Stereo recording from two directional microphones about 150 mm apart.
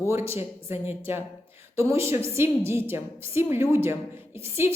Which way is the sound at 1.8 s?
15° right (ahead or behind).